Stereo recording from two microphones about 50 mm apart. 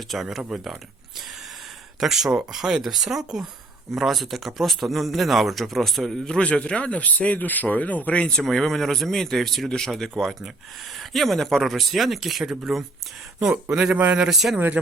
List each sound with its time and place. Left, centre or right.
0.1 s speech: centre
2.0 s speech: centre
6.1 s speech: centre
8.4 s speech: centre
13.9 s speech: right
14.2 s speech: centre